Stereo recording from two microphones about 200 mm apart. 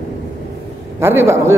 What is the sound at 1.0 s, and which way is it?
Speech, 15° right (ahead or behind).